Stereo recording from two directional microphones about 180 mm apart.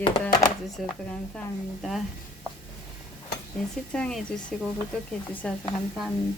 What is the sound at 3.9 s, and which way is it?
Speech, 5° left (ahead or behind).